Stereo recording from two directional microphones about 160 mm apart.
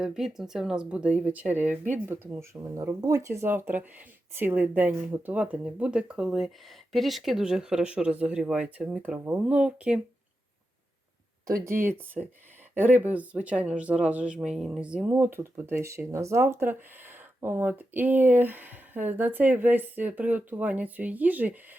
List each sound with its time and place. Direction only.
0.0 s speech: 5° right (ahead or behind)
11.4 s speech: 20° right (ahead or behind)